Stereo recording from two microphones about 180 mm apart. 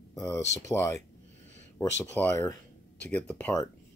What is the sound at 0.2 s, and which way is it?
Speech, 15° left (ahead or behind).